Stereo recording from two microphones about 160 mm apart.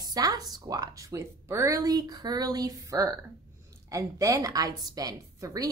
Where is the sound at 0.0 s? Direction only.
25° right (ahead or behind).